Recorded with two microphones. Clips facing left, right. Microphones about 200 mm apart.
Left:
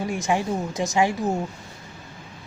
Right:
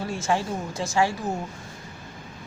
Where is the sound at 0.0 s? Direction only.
15° left (ahead or behind).